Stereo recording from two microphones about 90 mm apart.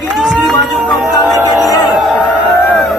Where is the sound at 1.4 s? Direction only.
45° left (ahead or behind).